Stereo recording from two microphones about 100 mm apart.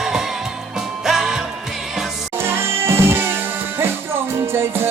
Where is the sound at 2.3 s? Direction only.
25° right (ahead or behind).